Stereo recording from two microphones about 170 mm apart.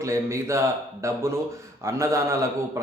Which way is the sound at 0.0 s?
15° right (ahead or behind).